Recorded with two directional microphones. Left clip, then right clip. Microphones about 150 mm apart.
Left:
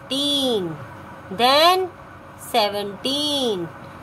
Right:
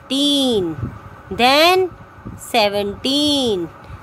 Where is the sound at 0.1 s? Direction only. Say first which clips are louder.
Right 4 dB; 55° right (ahead or behind).